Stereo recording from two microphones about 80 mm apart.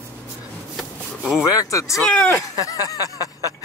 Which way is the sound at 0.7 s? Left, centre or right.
Centre.